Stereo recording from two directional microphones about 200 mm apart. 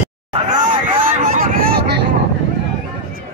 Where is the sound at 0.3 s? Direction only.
35° right (ahead or behind); by 2.0 s 55° right (ahead or behind).